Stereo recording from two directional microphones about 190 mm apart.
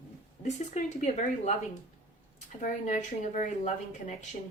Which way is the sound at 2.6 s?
40° left (ahead or behind).